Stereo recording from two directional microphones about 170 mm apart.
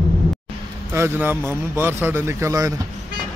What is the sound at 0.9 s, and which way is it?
A man's voice, 15° right (ahead or behind).